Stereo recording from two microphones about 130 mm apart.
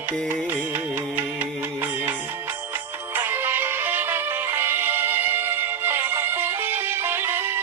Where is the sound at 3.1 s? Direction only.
15° right (ahead or behind).